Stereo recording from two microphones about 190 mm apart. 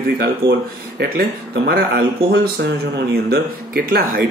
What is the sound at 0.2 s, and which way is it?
Speech, 55° right (ahead or behind).